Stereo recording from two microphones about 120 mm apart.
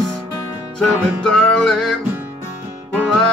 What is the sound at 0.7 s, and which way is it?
Music, 5° left (ahead or behind).